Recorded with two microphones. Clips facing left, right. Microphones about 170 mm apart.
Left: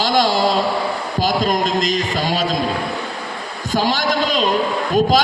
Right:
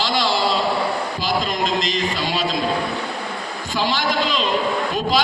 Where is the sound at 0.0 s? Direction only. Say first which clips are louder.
Left 4 dB; 45° left (ahead or behind).